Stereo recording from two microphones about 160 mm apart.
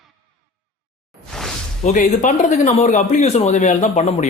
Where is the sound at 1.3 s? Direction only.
5° left (ahead or behind).